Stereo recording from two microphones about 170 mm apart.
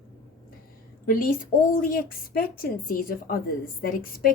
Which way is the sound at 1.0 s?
55° left (ahead or behind).